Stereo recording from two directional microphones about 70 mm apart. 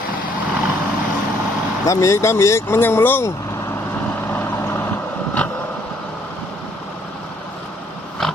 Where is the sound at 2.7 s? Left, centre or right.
Left.